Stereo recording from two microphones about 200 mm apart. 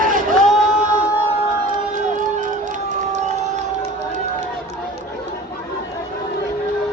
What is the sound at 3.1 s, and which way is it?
Crowd, 35° right (ahead or behind).